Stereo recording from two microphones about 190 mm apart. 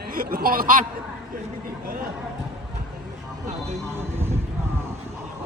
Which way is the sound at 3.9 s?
15° right (ahead or behind).